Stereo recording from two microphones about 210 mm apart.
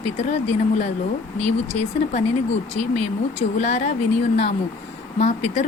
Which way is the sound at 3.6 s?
35° left (ahead or behind).